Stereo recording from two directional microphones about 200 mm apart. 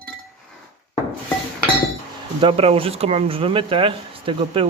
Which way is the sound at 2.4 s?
30° right (ahead or behind).